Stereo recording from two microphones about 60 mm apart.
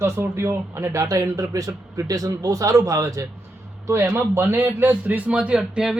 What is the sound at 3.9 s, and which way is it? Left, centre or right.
A man's voice, right.